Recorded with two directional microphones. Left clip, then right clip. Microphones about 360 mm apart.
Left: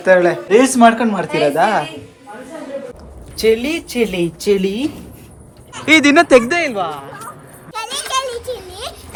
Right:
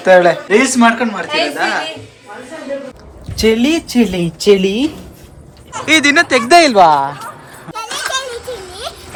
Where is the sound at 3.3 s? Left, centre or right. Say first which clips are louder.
Right 2 dB; centre.